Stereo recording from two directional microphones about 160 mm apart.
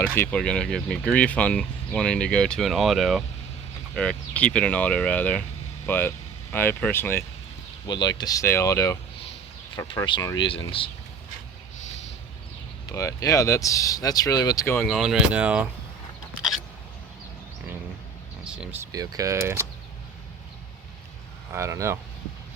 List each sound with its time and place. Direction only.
0.2 s speech: 5° left (ahead or behind)
7.9 s speech: 25° left (ahead or behind)
10.1 s speech: 25° left (ahead or behind)
12.9 s speech: 20° left (ahead or behind)
14.8 s speech: centre (ahead or behind)
18.4 s speech: 5° right (ahead or behind)
21.5 s speech: 20° right (ahead or behind)